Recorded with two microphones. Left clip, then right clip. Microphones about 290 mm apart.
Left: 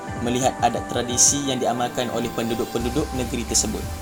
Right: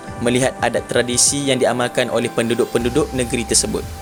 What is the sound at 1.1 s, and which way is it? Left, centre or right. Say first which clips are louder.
Speech: right 1 dB; right.